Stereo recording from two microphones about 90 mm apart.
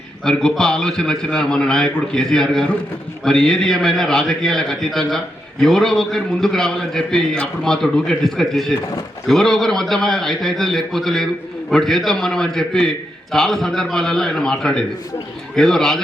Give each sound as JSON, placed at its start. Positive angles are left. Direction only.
{"t": 0.3, "sound": "a man's voice", "side_deg": 5}